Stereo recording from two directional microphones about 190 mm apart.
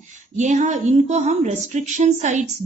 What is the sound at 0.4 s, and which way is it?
A woman's voice, 40° right (ahead or behind).